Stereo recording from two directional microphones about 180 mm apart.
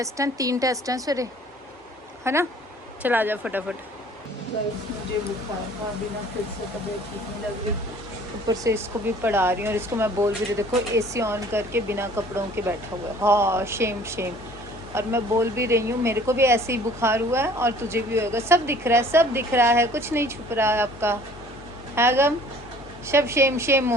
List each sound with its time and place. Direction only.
0.0 s speech: 20° right (ahead or behind)
8.4 s speech: 20° right (ahead or behind)